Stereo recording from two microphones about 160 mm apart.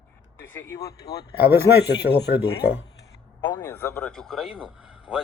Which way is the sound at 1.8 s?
90° left.